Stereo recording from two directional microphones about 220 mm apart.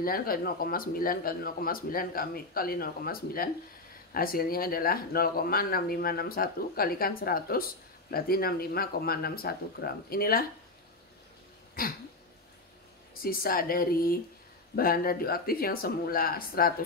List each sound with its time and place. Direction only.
0.0 s speech: 40° left (ahead or behind)
11.8 s speech: 40° left (ahead or behind)
13.2 s speech: 40° left (ahead or behind)